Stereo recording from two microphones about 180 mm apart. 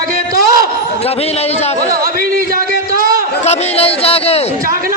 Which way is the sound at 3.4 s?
35° left (ahead or behind).